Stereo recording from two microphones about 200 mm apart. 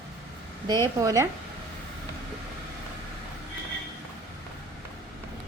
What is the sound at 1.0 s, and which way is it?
Speech, 15° right (ahead or behind).